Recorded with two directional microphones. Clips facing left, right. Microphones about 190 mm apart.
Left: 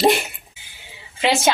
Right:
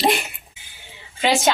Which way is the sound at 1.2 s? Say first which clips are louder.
Even; centre (ahead or behind).